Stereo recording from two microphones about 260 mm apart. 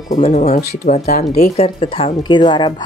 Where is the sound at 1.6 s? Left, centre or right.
Left.